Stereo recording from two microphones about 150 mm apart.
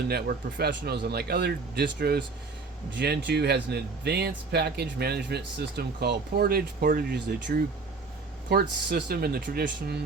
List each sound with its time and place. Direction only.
0.1 s speech: 90° right